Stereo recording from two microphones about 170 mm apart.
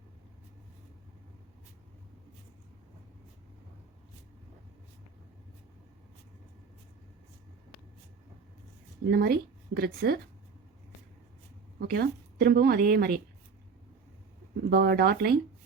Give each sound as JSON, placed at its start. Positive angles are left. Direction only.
{"t": 9.0, "sound": "speech", "side_deg": -65}
{"t": 11.8, "sound": "a woman's voice", "side_deg": -65}
{"t": 14.7, "sound": "speech", "side_deg": -65}